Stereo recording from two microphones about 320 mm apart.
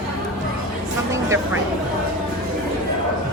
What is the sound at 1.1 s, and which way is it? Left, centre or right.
Speech, centre.